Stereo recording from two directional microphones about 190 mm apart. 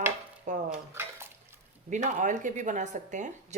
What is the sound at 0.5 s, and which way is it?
Dishes, 40° right (ahead or behind).